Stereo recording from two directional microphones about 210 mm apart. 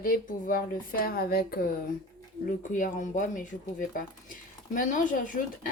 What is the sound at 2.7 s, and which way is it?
Speech, 40° left (ahead or behind).